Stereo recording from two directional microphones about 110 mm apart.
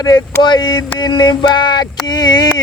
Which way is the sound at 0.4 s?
40° left (ahead or behind).